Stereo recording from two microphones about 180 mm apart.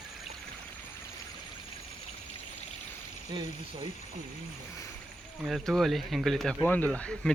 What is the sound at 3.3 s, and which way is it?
Speech, 25° right (ahead or behind).